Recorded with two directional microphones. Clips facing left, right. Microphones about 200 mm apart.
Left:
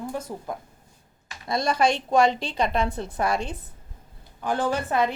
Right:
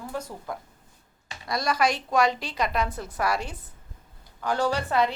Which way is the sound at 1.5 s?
25° left (ahead or behind).